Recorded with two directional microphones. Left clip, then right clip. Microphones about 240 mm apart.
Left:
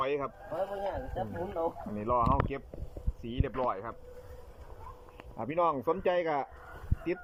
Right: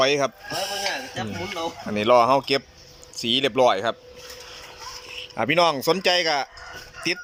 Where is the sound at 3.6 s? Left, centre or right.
Right.